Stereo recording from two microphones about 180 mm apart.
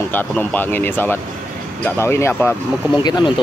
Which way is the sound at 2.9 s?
25° left (ahead or behind).